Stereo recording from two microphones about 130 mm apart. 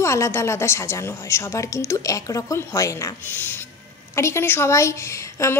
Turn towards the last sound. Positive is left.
turn(degrees=20)  # may be behind; listen again after turning